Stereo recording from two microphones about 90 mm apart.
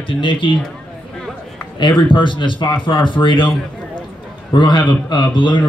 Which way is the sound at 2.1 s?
65° left (ahead or behind).